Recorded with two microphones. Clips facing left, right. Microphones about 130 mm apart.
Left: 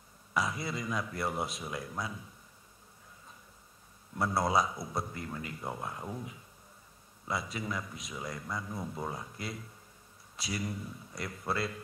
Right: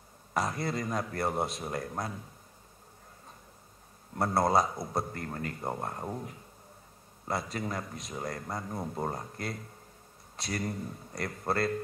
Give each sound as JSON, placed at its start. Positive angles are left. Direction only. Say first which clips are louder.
{"t": 0.5, "sound": "speech", "louder": "right 3 dB", "side_deg": -50}
{"t": 4.1, "sound": "speech", "louder": "right 3 dB", "side_deg": -50}
{"t": 7.5, "sound": "speech", "louder": "right 2 dB", "side_deg": -45}